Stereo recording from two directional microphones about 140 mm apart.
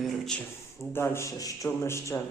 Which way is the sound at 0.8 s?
20° left (ahead or behind).